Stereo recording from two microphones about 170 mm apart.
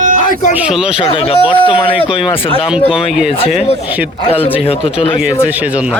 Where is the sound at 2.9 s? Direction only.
5° right (ahead or behind).